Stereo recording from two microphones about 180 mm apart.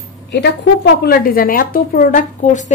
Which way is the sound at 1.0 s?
55° left (ahead or behind).